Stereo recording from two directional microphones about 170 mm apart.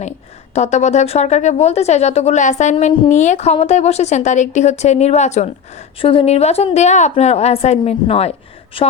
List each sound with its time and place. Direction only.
0.5 s a woman's voice: 40° left (ahead or behind)
6.0 s a woman's voice: 30° left (ahead or behind)